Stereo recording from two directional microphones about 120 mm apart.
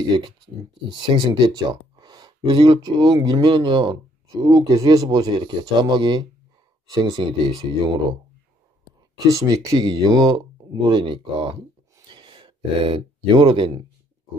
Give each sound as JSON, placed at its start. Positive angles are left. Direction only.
{"t": 0.8, "sound": "speech", "side_deg": -40}
{"t": 9.3, "sound": "speech", "side_deg": -30}
{"t": 12.1, "sound": "a sound", "side_deg": -45}